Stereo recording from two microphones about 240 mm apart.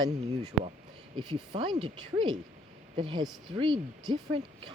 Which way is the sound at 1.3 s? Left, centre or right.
Right.